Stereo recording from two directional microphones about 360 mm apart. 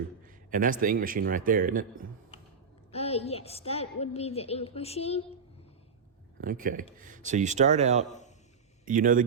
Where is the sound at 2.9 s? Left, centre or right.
Centre.